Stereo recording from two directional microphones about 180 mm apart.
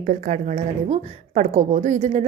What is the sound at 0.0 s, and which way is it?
A woman's voice, 45° right (ahead or behind).